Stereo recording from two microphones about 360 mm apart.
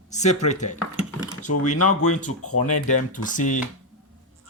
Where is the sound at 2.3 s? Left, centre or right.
Left.